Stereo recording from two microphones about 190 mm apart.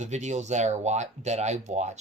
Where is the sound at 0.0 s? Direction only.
40° right (ahead or behind).